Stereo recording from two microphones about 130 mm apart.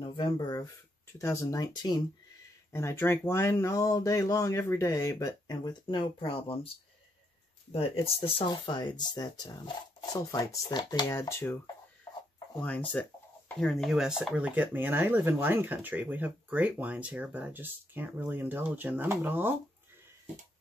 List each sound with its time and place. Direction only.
0.0 s speech: 40° left (ahead or behind)
7.7 s speech: 50° left (ahead or behind)
8.5 s speech: 35° left (ahead or behind); by 19.5 s 15° right (ahead or behind)